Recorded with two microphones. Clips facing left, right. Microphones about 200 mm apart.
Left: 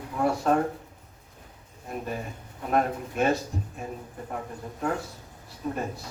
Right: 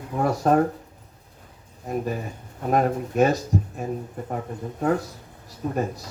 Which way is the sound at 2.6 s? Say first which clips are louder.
Right 4 dB; 40° right (ahead or behind).